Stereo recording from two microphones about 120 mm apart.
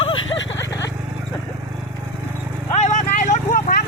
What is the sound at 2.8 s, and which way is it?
Vehicle, 90° left.